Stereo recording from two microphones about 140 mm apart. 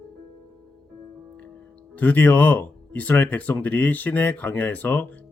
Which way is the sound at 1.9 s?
15° left (ahead or behind).